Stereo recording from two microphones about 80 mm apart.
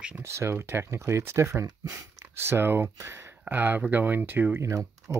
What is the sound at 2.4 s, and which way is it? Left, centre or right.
Speech, right.